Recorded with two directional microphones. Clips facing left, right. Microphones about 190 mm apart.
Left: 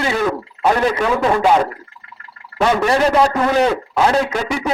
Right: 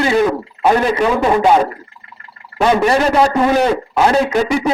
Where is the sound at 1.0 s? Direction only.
15° right (ahead or behind).